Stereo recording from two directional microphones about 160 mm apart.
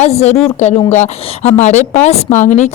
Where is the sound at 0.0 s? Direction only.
45° left (ahead or behind).